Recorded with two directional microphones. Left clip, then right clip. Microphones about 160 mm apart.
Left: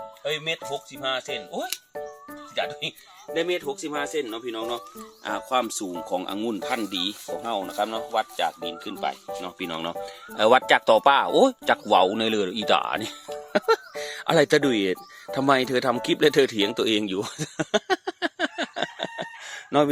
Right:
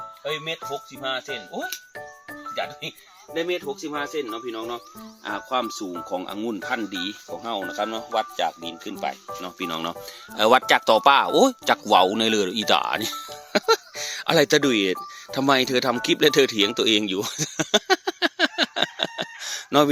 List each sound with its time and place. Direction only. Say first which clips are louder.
0.3 s speech: left 1 dB; 10° left (ahead or behind)
3.3 s speech: even; 10° left (ahead or behind)
7.4 s speech: even; centre (ahead or behind); by 19.9 s 20° right (ahead or behind)